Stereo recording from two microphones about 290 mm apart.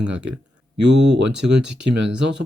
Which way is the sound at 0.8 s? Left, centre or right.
Right.